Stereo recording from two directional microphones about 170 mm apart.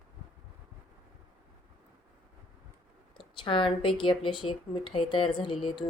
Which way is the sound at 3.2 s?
30° left (ahead or behind).